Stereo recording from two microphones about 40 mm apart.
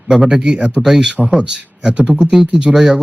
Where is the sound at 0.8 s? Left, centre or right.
Centre.